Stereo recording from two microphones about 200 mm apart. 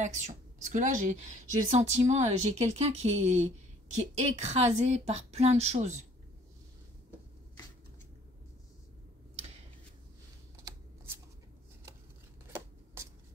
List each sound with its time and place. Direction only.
0.0 s a woman's voice: 35° right (ahead or behind)